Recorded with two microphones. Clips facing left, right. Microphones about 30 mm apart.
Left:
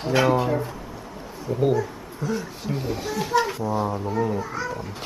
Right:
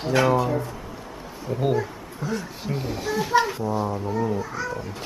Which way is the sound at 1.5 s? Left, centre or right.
Centre.